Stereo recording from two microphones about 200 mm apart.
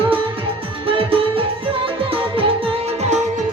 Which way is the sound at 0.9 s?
25° right (ahead or behind).